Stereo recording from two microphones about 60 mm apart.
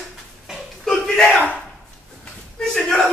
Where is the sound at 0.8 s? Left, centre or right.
Centre.